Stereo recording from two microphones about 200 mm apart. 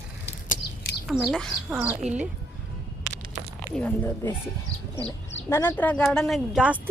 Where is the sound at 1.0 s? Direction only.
Centre (ahead or behind).